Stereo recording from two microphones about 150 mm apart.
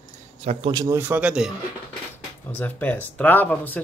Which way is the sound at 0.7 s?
25° right (ahead or behind).